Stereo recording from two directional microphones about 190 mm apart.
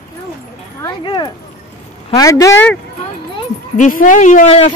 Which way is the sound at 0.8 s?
25° left (ahead or behind).